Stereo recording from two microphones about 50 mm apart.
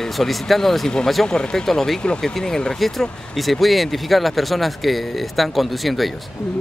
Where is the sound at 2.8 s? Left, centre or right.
Centre.